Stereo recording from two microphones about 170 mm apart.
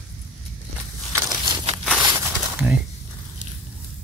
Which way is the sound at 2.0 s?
15° right (ahead or behind).